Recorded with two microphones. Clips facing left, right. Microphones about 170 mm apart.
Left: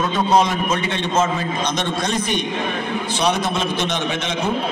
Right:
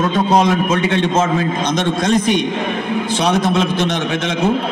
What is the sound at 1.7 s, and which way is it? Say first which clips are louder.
Speech: right 6 dB; 50° right (ahead or behind).